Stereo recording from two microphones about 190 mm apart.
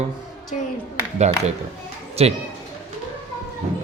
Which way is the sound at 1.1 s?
35° right (ahead or behind).